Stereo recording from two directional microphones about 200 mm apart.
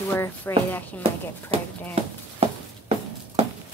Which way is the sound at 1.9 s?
30° right (ahead or behind).